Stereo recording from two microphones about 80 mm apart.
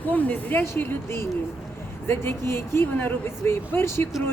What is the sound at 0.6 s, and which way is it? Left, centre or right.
Speech, left.